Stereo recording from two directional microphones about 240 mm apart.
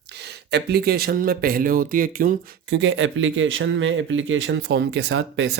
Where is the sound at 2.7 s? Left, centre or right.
Right.